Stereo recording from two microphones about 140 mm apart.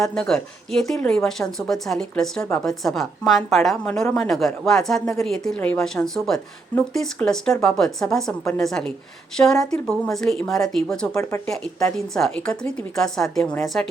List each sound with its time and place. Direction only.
0.0 s speech: 5° left (ahead or behind)
11.1 s speech: 20° left (ahead or behind)
11.4 s speech: 5° left (ahead or behind)